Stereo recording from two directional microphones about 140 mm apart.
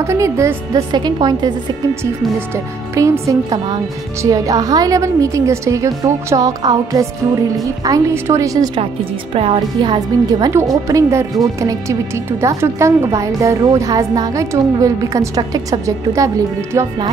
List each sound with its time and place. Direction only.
0.0 s speech: 20° right (ahead or behind)
2.5 s speech: 20° right (ahead or behind)
9.3 s a woman's voice: 45° right (ahead or behind)
9.8 s speech: 30° right (ahead or behind)